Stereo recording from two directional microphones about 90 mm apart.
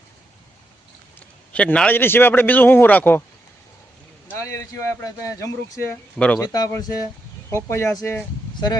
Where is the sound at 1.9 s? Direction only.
25° left (ahead or behind).